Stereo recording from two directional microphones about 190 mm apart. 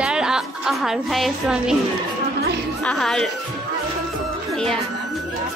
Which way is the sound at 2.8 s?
5° left (ahead or behind).